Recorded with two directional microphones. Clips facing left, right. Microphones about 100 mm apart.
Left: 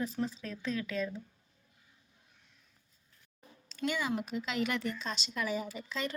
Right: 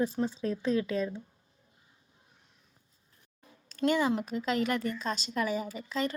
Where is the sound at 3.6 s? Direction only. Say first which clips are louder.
Right 7 dB; 45° right (ahead or behind).